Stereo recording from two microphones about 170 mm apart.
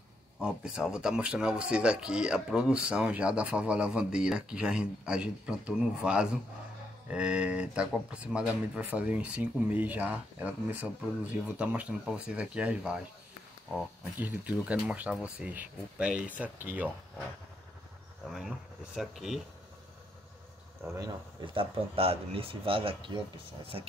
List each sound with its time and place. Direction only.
0.4 s speech: 5° right (ahead or behind)
18.9 s speech: centre (ahead or behind)
20.8 s speech: 25° right (ahead or behind)